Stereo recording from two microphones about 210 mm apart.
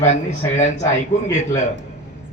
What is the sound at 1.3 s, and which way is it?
Speech, 35° left (ahead or behind).